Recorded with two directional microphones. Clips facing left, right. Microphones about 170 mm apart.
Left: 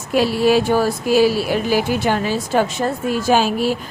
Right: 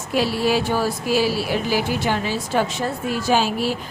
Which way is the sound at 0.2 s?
50° left (ahead or behind).